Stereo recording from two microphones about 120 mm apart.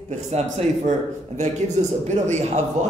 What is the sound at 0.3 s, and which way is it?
A man's voice, 65° right (ahead or behind).